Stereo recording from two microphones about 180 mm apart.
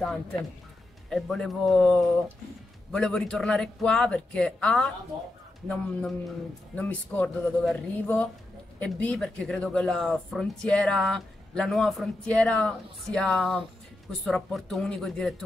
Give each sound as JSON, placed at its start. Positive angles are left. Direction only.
{"t": 0.0, "sound": "a man's voice", "side_deg": 5}